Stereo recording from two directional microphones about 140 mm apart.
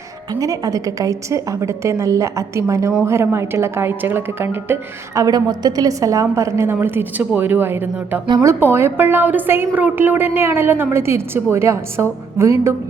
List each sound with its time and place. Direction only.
0.3 s a woman's voice: 25° right (ahead or behind)